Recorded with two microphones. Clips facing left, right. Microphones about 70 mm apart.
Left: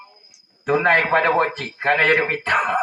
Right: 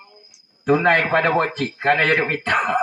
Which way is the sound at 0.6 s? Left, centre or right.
Left.